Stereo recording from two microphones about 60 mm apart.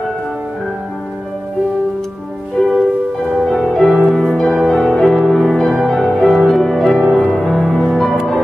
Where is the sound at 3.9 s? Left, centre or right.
Centre.